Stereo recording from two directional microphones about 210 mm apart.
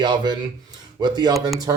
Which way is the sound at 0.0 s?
20° right (ahead or behind).